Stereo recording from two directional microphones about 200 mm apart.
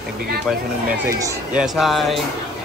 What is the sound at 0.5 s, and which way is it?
Speech, 5° right (ahead or behind).